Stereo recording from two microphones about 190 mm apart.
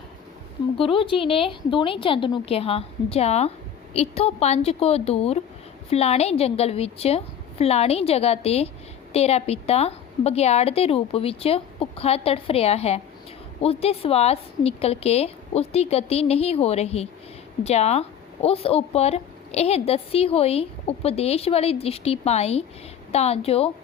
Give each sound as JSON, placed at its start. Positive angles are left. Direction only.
{"t": 0.8, "sound": "a woman's voice", "side_deg": 25}